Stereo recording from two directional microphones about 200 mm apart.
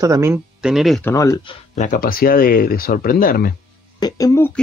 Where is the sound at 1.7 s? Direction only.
40° left (ahead or behind).